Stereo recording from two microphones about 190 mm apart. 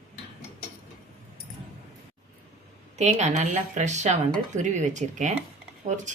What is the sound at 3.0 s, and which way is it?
A woman's voice, 40° right (ahead or behind).